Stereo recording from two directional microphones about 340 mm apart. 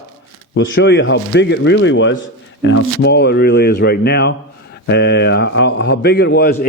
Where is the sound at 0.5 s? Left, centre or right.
Left.